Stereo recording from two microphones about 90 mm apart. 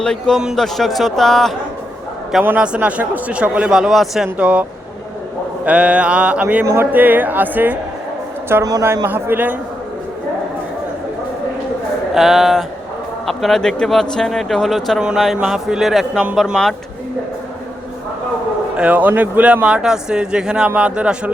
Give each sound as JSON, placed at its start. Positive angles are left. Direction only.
{"t": 0.0, "sound": "a man's voice", "side_deg": 5}
{"t": 2.6, "sound": "a man's voice", "side_deg": -15}
{"t": 5.6, "sound": "a man's voice", "side_deg": -15}
{"t": 12.1, "sound": "speech", "side_deg": -5}
{"t": 18.8, "sound": "a man's voice", "side_deg": -15}